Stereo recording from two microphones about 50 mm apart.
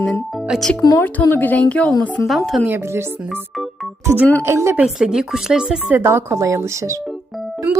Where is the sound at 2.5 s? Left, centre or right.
Centre.